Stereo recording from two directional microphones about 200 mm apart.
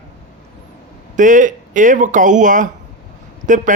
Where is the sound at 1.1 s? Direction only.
40° right (ahead or behind).